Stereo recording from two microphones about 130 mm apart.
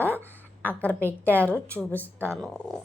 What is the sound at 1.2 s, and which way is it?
Speech, 10° left (ahead or behind).